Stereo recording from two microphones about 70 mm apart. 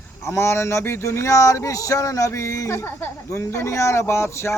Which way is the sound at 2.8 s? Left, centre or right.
Left.